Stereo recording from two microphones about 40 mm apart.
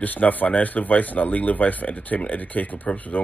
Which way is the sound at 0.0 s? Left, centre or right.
Left.